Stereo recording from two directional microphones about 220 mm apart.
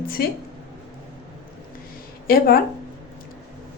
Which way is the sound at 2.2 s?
40° left (ahead or behind).